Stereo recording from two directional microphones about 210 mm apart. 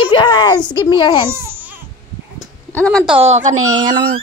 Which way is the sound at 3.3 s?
35° right (ahead or behind).